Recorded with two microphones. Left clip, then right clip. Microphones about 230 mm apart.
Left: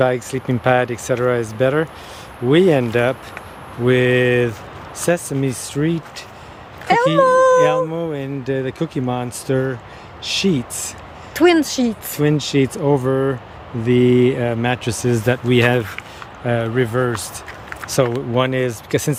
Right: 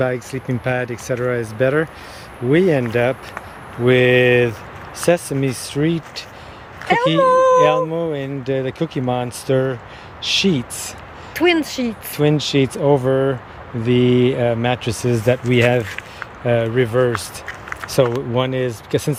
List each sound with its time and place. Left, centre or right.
0.0 s speech: centre
6.8 s speech: left
7.2 s a sound: left
7.9 s speech: centre
11.3 s speech: left
12.1 s speech: centre